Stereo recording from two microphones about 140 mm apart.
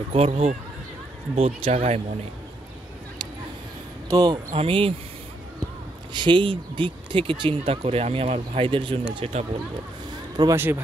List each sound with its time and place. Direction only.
0.1 s speech: 45° right (ahead or behind)
4.1 s speech: 25° right (ahead or behind)
4.6 s speech: 40° right (ahead or behind)
6.1 s speech: 35° right (ahead or behind)
10.5 s speech: 15° right (ahead or behind)